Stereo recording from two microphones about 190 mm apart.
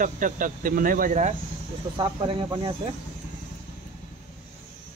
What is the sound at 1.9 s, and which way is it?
Speech, 25° right (ahead or behind).